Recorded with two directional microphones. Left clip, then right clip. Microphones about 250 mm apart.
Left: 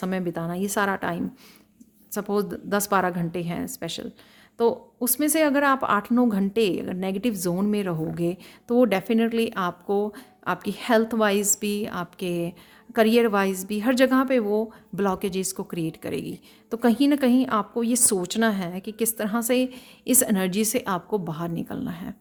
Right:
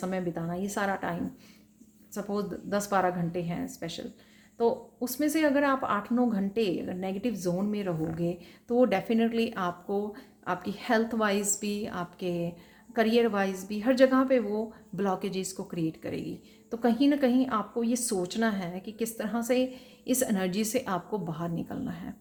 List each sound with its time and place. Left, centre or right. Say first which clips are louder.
0.0 s a woman's voice: left 4 dB; left
2.1 s a woman's voice: left 7 dB; left